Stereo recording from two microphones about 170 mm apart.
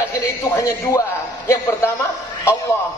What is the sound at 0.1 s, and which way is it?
Speech, 20° left (ahead or behind).